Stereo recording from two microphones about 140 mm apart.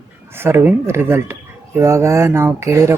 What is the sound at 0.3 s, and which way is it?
Speech, 15° right (ahead or behind).